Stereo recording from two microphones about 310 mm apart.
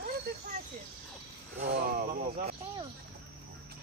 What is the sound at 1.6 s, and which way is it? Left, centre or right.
Speech, right.